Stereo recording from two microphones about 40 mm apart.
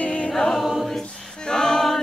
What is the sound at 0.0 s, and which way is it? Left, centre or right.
A capella, left.